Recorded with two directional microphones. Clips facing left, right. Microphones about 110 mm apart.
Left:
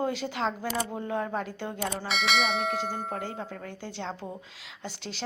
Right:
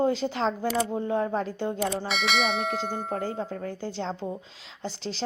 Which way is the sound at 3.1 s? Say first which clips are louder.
Right 5 dB; 35° right (ahead or behind).